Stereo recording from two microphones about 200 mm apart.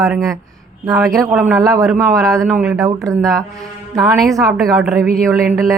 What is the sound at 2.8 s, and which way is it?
Speech, 15° right (ahead or behind).